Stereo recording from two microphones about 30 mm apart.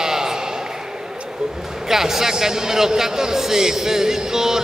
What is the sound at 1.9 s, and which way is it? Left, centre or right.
A man's voice, centre.